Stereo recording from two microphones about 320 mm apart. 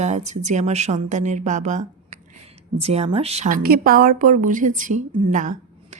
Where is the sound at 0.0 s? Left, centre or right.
Right.